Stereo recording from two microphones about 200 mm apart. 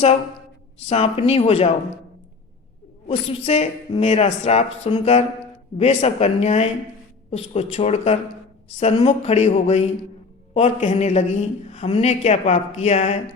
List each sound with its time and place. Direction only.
0.9 s a man's voice: 30° left (ahead or behind)
3.1 s a man's voice: 30° left (ahead or behind)